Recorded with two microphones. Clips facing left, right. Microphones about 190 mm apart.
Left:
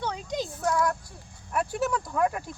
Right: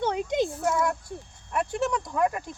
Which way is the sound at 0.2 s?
55° right (ahead or behind).